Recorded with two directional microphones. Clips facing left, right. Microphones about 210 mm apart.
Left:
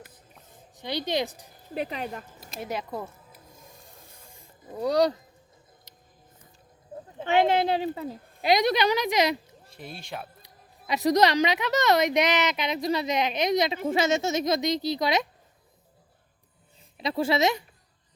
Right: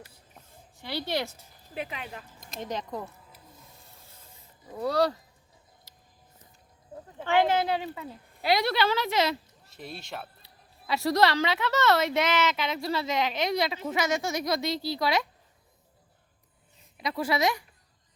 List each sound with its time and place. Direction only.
0.8 s speech: 20° left (ahead or behind)
1.7 s speech: 40° left (ahead or behind)
2.4 s speech: 5° left (ahead or behind)
3.6 s printer: 15° left (ahead or behind)
4.8 s speech: 15° left (ahead or behind)
5.9 s music: 20° left (ahead or behind)
7.2 s a woman's voice: 20° left (ahead or behind)
8.4 s speech: 20° left (ahead or behind)
9.7 s speech: centre (ahead or behind)
10.4 s a woman's voice: 20° left (ahead or behind)
17.0 s a woman's voice: 25° left (ahead or behind)